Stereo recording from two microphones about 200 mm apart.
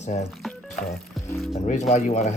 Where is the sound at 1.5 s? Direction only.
35° left (ahead or behind).